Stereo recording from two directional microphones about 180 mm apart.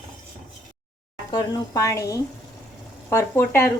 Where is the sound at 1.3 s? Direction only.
20° left (ahead or behind).